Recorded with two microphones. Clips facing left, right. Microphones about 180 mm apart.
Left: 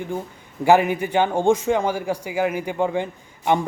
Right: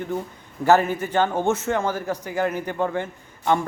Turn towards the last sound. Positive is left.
turn(degrees=15)  # may be behind; listen again after turning